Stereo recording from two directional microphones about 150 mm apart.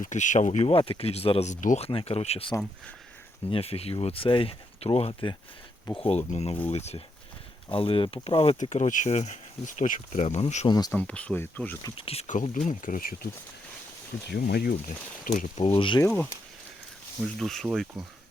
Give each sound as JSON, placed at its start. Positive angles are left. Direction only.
{"t": 0.0, "sound": "speech", "side_deg": 55}
{"t": 1.9, "sound": "speech", "side_deg": 40}
{"t": 3.5, "sound": "speech", "side_deg": 40}
{"t": 10.7, "sound": "speech", "side_deg": 25}
{"t": 10.9, "sound": "speech", "side_deg": 10}
{"t": 11.9, "sound": "speech", "side_deg": 40}
{"t": 12.3, "sound": "speech", "side_deg": 60}
{"t": 14.3, "sound": "speech", "side_deg": 90}
{"t": 15.5, "sound": "speech", "side_deg": 40}
{"t": 16.0, "sound": "speech", "side_deg": 10}